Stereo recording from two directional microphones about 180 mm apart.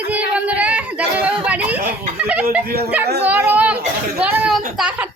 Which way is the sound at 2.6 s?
60° right (ahead or behind).